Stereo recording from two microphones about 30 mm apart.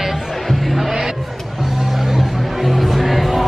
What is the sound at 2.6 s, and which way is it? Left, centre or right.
Music, centre.